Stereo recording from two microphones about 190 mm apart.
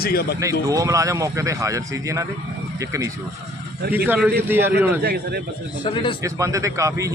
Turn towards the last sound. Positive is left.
turn(degrees=-15)  # may be behind; listen again after turning